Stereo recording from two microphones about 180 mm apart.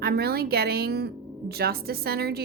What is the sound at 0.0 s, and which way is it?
A woman's voice, 60° right (ahead or behind).